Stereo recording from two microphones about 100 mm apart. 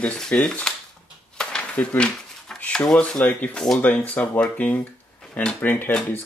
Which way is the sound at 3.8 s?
15° left (ahead or behind).